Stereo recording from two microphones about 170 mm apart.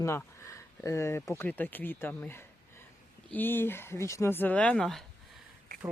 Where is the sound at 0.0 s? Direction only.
15° left (ahead or behind).